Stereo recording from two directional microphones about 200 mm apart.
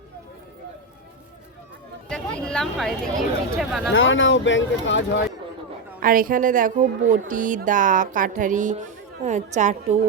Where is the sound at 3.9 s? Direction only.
75° left (ahead or behind).